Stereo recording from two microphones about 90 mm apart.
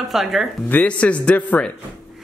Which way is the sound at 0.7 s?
15° left (ahead or behind).